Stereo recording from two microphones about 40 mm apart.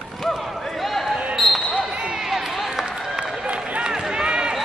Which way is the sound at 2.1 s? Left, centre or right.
Centre.